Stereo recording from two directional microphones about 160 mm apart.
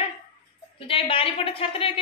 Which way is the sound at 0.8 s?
35° left (ahead or behind).